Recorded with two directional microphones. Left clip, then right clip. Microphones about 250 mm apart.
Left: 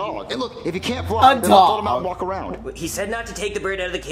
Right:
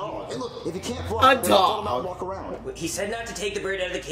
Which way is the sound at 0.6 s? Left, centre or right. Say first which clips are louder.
Left 6 dB; left.